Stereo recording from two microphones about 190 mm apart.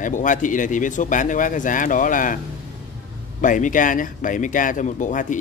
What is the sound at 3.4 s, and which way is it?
Speech, 45° left (ahead or behind).